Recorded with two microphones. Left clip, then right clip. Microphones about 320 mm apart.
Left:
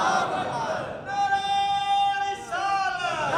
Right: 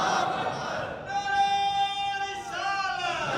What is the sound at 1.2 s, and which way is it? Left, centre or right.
Music, centre.